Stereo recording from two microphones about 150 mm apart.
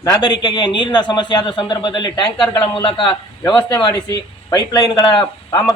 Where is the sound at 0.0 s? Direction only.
25° left (ahead or behind).